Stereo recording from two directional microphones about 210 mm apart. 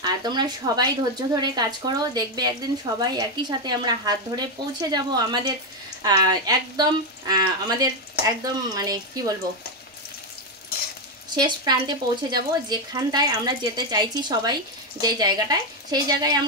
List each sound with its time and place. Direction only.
0.0 s speech: 20° right (ahead or behind)
11.2 s speech: 20° right (ahead or behind)